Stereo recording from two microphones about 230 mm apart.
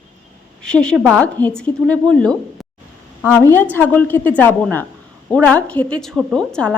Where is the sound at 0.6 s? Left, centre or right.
Centre.